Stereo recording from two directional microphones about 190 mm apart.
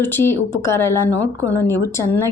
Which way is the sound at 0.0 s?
10° left (ahead or behind).